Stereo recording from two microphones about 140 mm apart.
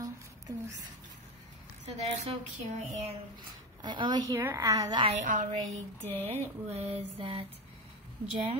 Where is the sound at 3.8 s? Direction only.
30° right (ahead or behind).